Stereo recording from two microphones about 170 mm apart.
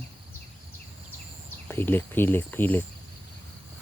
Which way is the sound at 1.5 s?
10° left (ahead or behind).